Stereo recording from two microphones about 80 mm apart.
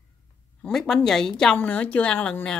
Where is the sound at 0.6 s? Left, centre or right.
Centre.